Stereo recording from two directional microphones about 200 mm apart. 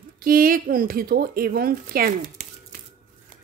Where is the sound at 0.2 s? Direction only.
45° right (ahead or behind).